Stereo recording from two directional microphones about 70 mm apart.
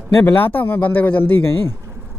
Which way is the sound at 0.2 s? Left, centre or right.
Left.